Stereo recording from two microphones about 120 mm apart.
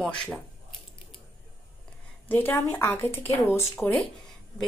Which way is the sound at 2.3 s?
15° left (ahead or behind).